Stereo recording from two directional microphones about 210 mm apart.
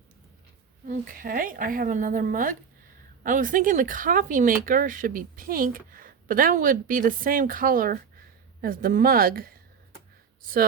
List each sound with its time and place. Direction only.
0.9 s a woman's voice: 40° right (ahead or behind)